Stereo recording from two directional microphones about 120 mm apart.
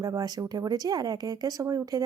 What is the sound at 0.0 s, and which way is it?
Speech, 35° right (ahead or behind).